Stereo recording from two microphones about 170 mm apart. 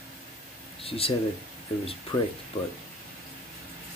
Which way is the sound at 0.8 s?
35° left (ahead or behind).